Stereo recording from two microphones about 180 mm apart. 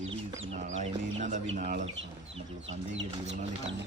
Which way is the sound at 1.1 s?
40° right (ahead or behind).